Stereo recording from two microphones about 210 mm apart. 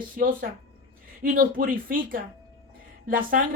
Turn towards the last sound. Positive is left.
turn(degrees=-40)  # may be behind; listen again after turning